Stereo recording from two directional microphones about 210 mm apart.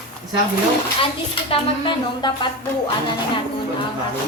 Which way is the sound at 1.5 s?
25° left (ahead or behind).